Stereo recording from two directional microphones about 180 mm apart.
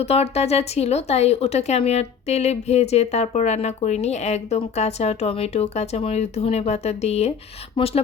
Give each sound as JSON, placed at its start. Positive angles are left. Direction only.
{"t": 0.0, "sound": "speech", "side_deg": 35}